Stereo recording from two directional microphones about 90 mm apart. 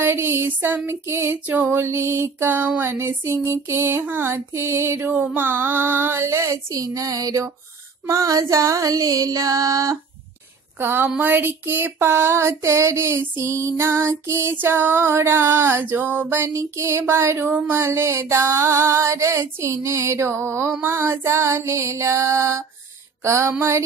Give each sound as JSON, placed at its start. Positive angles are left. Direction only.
{"t": 0.0, "sound": "female singing", "side_deg": -25}
{"t": 8.1, "sound": "music", "side_deg": -40}
{"t": 10.8, "sound": "female singing", "side_deg": -25}
{"t": 20.8, "sound": "music", "side_deg": -25}